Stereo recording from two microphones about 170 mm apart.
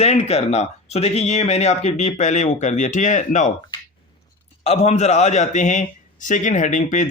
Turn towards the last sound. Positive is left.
turn(degrees=45)  # may be behind; listen again after turning